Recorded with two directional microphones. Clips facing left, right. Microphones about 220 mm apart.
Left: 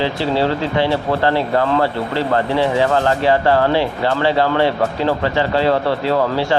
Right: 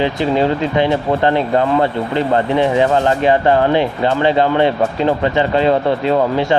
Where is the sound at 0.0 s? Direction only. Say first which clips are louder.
Right 2 dB; 15° right (ahead or behind).